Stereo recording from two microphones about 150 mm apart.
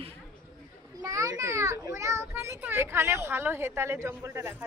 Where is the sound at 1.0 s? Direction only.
25° right (ahead or behind).